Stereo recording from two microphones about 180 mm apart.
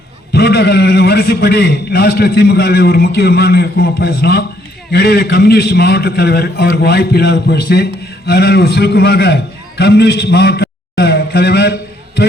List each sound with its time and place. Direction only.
0.3 s a man's voice: 65° left (ahead or behind)